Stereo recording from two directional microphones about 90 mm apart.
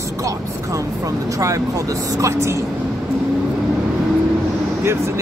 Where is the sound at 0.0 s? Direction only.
35° right (ahead or behind).